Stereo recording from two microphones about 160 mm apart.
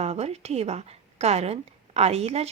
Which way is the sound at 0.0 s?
40° right (ahead or behind).